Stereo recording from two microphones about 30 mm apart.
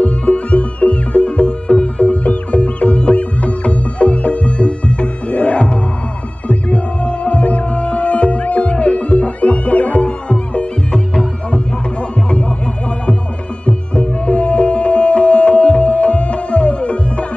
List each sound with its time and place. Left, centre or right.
0.0 s music: left
13.7 s music: left